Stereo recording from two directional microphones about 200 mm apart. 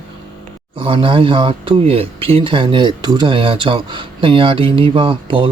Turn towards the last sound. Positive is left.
turn(degrees=-25)  # may be behind; listen again after turning